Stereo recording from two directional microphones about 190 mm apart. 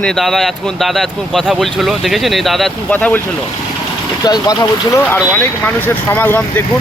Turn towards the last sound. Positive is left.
turn(degrees=10)  # may be behind; listen again after turning